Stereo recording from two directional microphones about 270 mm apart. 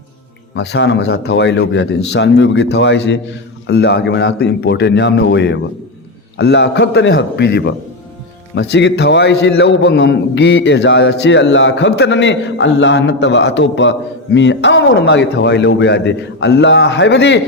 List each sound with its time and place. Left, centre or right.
0.5 s a man's voice: left